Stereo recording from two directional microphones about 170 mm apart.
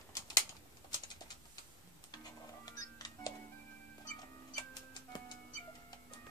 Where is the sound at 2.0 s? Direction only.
25° left (ahead or behind).